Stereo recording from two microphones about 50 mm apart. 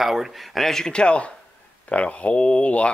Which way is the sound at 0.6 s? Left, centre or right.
Centre.